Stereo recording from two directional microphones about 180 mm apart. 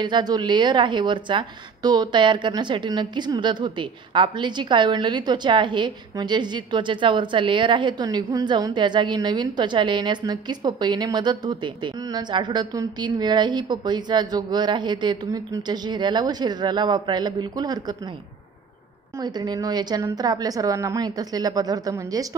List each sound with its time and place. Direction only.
0.0 s a woman's voice: 25° right (ahead or behind)
19.1 s a woman's voice: 25° right (ahead or behind)